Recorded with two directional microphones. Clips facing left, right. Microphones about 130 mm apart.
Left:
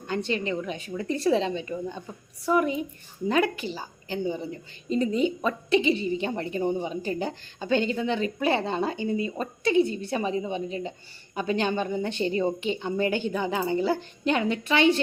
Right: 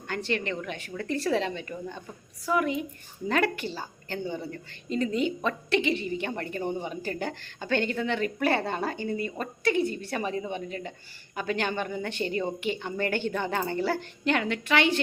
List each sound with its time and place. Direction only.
0.1 s a woman's voice: 20° left (ahead or behind)